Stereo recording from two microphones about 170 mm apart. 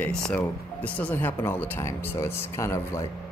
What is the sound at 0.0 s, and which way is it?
Speech, 10° left (ahead or behind).